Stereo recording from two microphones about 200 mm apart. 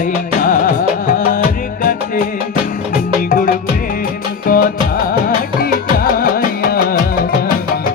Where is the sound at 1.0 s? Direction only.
40° left (ahead or behind).